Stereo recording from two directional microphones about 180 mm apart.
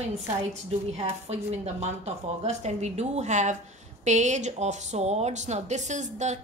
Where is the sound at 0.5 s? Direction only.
35° right (ahead or behind).